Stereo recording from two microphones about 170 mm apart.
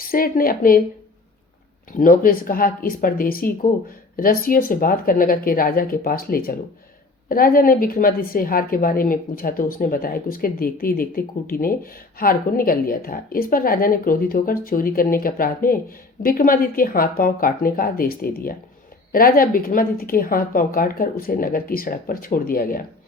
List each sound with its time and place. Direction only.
0.0 s a woman's voice: 60° left (ahead or behind)
1.9 s a woman's voice: 55° left (ahead or behind)